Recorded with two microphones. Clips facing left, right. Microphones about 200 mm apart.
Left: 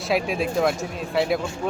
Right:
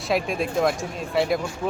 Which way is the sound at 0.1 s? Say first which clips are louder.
Left 1 dB; centre (ahead or behind).